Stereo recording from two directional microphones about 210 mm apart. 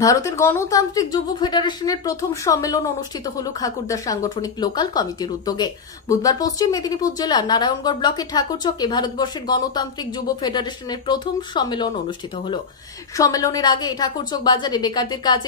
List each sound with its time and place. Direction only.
0.0 s a woman's voice: 15° left (ahead or behind)
13.1 s a woman's voice: 15° left (ahead or behind)